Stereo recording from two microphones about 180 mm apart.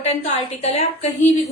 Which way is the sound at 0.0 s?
35° left (ahead or behind).